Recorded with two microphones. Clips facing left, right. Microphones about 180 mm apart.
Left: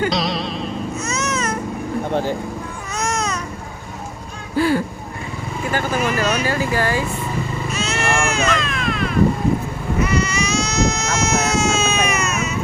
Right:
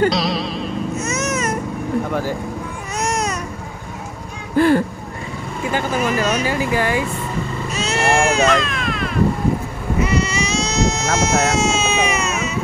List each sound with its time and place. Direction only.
0.1 s music: centre (ahead or behind)
2.0 s vehicle: 25° left (ahead or behind)
4.6 s speech: 50° right (ahead or behind)
5.7 s speech: 20° right (ahead or behind)
7.7 s vehicle: 35° right (ahead or behind)
8.5 s meow: centre (ahead or behind)
10.0 s baby cry: 25° right (ahead or behind)